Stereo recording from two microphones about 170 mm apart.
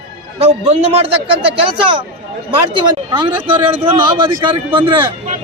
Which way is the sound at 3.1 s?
30° right (ahead or behind).